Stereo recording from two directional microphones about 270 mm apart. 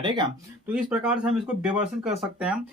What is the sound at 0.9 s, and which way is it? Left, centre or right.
Speech, centre.